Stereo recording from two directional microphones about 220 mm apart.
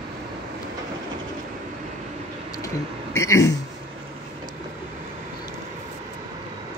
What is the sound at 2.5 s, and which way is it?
Speech, 15° left (ahead or behind).